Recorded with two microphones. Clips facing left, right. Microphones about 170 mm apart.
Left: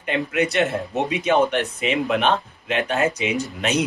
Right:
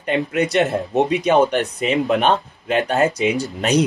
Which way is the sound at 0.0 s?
40° right (ahead or behind).